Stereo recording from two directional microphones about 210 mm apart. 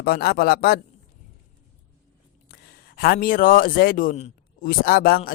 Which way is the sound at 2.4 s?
45° left (ahead or behind).